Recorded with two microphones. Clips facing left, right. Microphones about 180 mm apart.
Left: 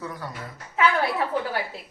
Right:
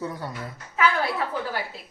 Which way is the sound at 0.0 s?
30° right (ahead or behind).